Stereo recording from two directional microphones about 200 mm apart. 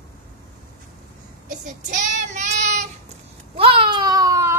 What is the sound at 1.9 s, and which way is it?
Child singing, 35° right (ahead or behind).